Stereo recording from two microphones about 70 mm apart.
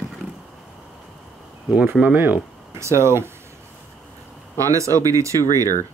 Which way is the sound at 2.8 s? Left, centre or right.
Right.